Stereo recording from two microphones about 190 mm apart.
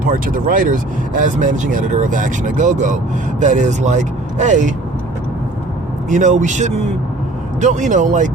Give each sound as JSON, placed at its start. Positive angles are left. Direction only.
{"t": 0.0, "sound": "speech", "side_deg": -45}
{"t": 6.1, "sound": "speech", "side_deg": -40}